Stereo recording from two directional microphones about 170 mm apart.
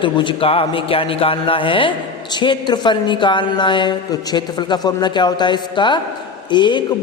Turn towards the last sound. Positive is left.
turn(degrees=25)  # may be behind; listen again after turning